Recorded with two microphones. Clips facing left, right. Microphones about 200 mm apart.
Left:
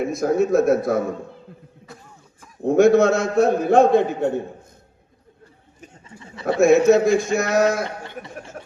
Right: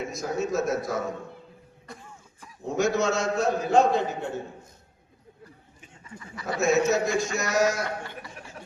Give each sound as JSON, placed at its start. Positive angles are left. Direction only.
{"t": 0.0, "sound": "a man's voice", "side_deg": 55}
{"t": 1.9, "sound": "cough", "side_deg": 0}
{"t": 2.6, "sound": "a man's voice", "side_deg": 55}
{"t": 6.1, "sound": "speech", "side_deg": 25}
{"t": 6.6, "sound": "a man's voice", "side_deg": 55}
{"t": 8.6, "sound": "a sound", "side_deg": 45}